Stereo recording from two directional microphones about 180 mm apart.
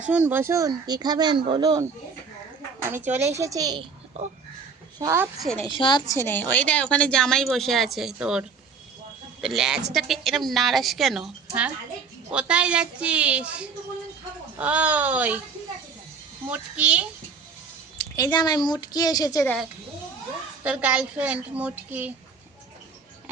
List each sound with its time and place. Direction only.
0.1 s speech: 10° right (ahead or behind)
3.2 s a woman's voice: 15° right (ahead or behind)
4.9 s a woman's voice: 15° right (ahead or behind)
5.4 s a woman's voice: 5° left (ahead or behind)
5.6 s a woman's voice: 25° left (ahead or behind)
6.1 s a woman's voice: 10° left (ahead or behind); by 15.4 s 10° right (ahead or behind)
16.5 s a woman's voice: 5° right (ahead or behind)
18.2 s a woman's voice: 25° left (ahead or behind)
20.7 s a woman's voice: 5° right (ahead or behind)